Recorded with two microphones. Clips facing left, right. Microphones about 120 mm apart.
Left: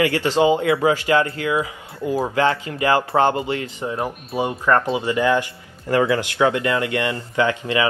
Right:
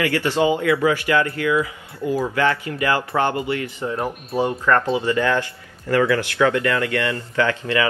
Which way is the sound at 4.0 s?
5° left (ahead or behind).